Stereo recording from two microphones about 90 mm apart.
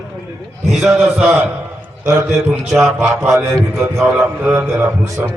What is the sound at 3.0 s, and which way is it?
A man's voice, 15° right (ahead or behind).